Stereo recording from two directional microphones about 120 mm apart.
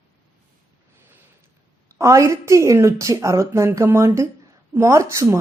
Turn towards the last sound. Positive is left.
turn(degrees=-25)  # may be behind; listen again after turning